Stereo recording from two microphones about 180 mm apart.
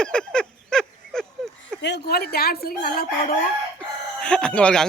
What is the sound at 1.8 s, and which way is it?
A woman's voice, 70° left (ahead or behind).